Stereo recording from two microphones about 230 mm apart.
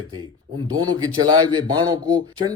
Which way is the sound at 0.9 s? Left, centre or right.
Centre.